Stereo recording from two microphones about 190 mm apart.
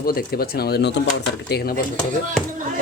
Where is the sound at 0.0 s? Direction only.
50° left (ahead or behind).